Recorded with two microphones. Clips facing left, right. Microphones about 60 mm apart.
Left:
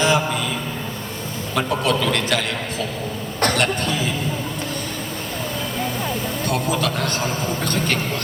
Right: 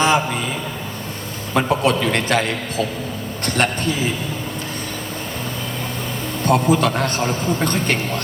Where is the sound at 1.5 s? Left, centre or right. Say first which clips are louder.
Right 3 dB; right.